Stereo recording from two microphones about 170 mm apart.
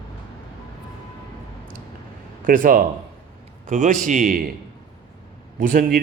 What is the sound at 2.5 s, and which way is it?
Speech, 55° right (ahead or behind).